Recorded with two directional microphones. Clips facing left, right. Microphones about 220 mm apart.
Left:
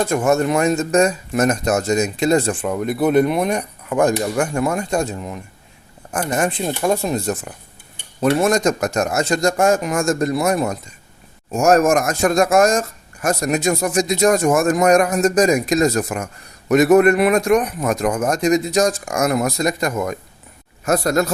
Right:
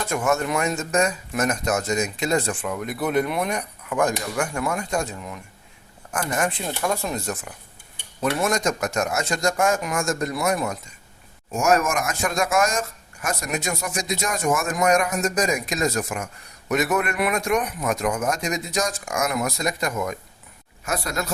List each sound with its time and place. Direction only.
0.0 s speech: 35° left (ahead or behind)
10.3 s speech: 30° left (ahead or behind)